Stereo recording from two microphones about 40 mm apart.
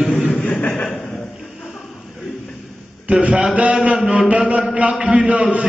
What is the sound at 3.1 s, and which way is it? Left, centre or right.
Chant, right.